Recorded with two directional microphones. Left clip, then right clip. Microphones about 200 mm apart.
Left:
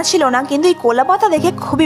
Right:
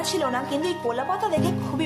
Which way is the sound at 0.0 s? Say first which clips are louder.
Left 11 dB; 40° left (ahead or behind).